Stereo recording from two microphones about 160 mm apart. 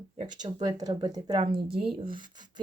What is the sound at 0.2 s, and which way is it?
Speech, 25° right (ahead or behind).